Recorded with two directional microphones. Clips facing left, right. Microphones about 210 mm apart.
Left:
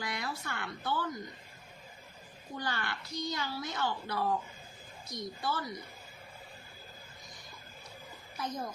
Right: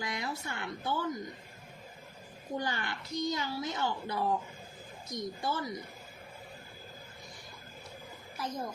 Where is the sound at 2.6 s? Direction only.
15° right (ahead or behind).